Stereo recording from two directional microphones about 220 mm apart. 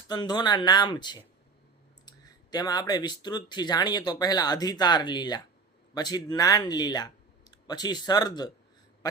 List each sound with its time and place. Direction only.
0.1 s speech: 20° left (ahead or behind)